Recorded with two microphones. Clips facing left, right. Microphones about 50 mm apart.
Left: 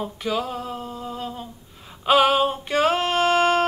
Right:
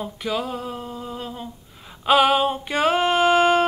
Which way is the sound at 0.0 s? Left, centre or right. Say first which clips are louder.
Left 1 dB; centre.